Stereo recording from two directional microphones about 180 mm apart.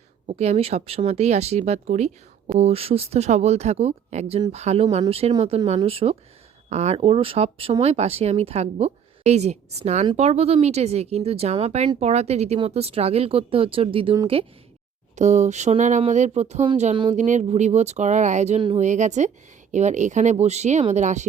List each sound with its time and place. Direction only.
0.3 s speech: 40° right (ahead or behind)
15.1 s speech: 40° right (ahead or behind)
17.2 s speech: 40° right (ahead or behind)